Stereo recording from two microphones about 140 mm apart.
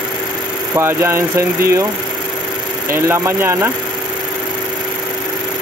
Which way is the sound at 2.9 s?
20° right (ahead or behind).